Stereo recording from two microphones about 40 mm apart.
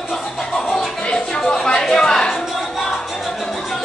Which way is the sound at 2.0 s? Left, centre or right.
Centre.